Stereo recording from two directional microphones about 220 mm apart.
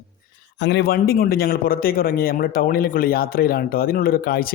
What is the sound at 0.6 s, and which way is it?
A man's voice, 50° left (ahead or behind).